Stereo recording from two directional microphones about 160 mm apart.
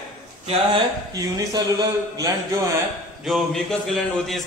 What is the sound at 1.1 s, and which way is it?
A man's voice, 25° right (ahead or behind).